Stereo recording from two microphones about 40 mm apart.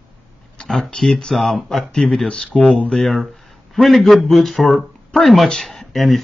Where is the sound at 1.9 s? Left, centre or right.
Centre.